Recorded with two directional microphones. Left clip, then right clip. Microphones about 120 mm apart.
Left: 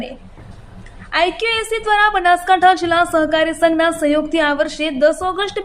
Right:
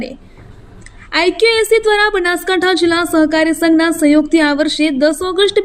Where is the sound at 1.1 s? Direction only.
30° right (ahead or behind).